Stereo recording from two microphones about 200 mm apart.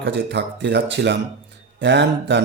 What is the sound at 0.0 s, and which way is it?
A man's voice, 60° right (ahead or behind).